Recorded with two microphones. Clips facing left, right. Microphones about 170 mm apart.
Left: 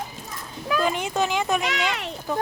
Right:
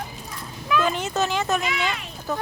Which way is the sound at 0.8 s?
15° left (ahead or behind).